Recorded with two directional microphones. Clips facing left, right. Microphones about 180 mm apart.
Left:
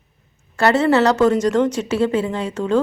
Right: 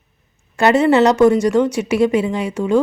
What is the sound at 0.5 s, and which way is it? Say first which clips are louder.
A woman's voice: right 2 dB; 15° right (ahead or behind).